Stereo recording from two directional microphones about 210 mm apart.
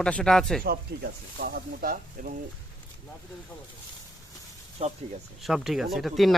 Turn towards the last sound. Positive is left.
turn(degrees=0)  # may be behind; listen again after turning